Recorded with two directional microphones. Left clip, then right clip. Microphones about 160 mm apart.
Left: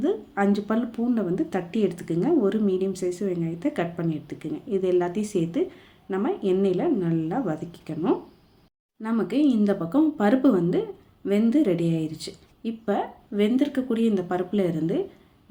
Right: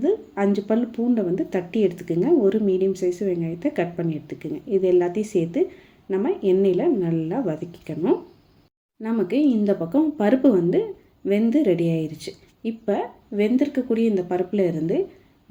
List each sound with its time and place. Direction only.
0.0 s speech: 10° right (ahead or behind)